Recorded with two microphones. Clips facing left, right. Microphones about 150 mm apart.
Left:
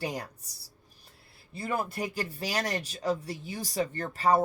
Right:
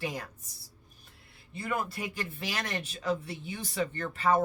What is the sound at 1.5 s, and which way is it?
Speech, 35° left (ahead or behind).